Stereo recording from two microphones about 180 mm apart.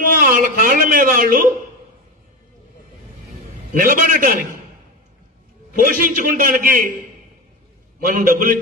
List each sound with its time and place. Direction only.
0.2 s a man's voice: 50° right (ahead or behind)
3.7 s a man's voice: 50° right (ahead or behind)
5.7 s a man's voice: 50° right (ahead or behind)
8.0 s a man's voice: 50° right (ahead or behind)